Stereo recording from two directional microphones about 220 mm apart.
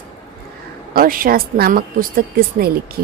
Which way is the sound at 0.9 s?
40° right (ahead or behind).